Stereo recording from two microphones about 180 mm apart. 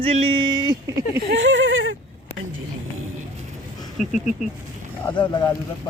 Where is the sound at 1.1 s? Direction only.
70° right (ahead or behind); by 2.0 s 90° right.